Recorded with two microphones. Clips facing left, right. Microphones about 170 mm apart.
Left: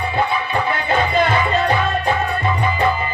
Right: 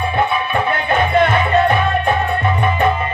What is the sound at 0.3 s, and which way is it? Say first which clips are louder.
Music: right 2 dB; 60° right (ahead or behind).